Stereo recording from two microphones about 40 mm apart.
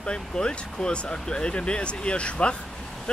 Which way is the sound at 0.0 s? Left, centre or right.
Left.